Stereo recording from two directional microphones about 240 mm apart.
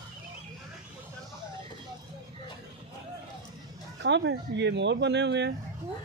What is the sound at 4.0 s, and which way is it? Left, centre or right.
Speech, right.